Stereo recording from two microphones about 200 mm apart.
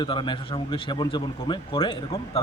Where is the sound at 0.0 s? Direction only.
25° left (ahead or behind).